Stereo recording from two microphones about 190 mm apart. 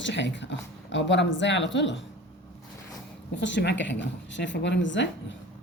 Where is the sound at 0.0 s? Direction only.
70° left (ahead or behind).